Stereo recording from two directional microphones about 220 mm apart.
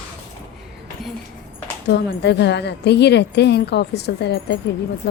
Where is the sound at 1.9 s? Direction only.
50° left (ahead or behind).